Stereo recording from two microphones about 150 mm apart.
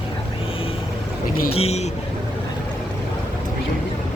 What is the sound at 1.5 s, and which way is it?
Speech, 45° left (ahead or behind).